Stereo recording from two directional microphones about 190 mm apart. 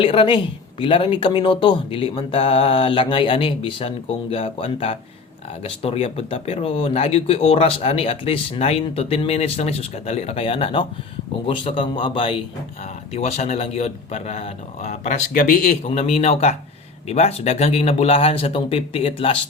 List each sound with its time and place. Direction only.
0.0 s speech: 30° left (ahead or behind)